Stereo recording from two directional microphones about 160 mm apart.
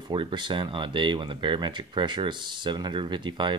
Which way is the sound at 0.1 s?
30° right (ahead or behind).